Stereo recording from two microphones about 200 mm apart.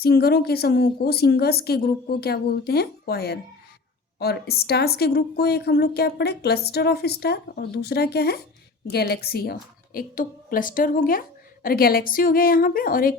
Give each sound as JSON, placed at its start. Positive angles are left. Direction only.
{"t": 0.0, "sound": "a woman's voice", "side_deg": 50}